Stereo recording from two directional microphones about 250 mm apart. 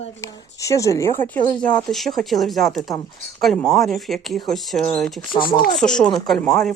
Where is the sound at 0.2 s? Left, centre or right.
Centre.